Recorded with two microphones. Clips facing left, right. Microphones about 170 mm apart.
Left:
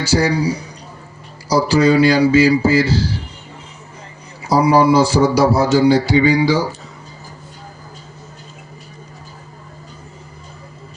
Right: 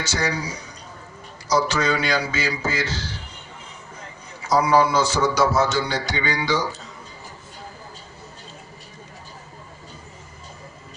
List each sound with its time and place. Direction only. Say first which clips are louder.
0.0 s a man's voice: left 10 dB; 35° left (ahead or behind)
4.4 s a man's voice: left 6 dB; 30° left (ahead or behind)